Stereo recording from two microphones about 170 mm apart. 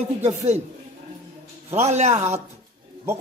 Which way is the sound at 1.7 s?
40° right (ahead or behind).